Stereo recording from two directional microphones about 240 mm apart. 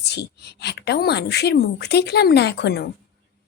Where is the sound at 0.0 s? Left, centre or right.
Left.